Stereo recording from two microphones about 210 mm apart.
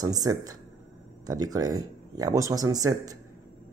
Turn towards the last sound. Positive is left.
turn(degrees=-15)  # may be behind; listen again after turning